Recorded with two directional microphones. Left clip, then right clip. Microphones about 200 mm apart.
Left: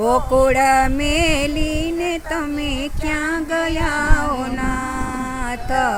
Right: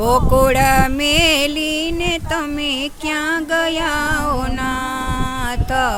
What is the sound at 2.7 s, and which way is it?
Music, 55° right (ahead or behind).